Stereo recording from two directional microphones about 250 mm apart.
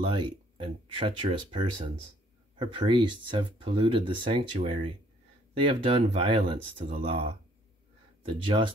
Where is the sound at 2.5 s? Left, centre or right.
Centre.